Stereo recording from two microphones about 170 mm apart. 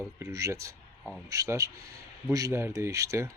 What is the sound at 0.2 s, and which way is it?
Speech, 20° right (ahead or behind).